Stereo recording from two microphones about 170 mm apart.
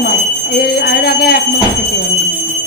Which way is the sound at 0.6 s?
65° left (ahead or behind).